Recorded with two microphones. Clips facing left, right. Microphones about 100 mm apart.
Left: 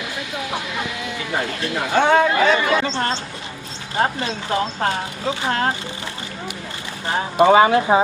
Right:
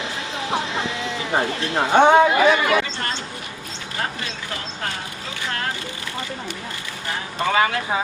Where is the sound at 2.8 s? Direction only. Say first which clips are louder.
Left 6 dB; 30° left (ahead or behind).